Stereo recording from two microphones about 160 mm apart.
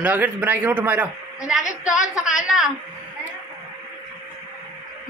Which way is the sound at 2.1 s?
5° right (ahead or behind).